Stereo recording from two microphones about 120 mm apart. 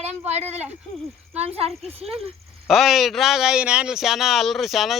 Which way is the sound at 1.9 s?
55° right (ahead or behind).